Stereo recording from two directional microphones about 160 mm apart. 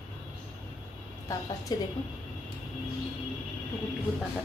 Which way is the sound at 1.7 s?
25° left (ahead or behind).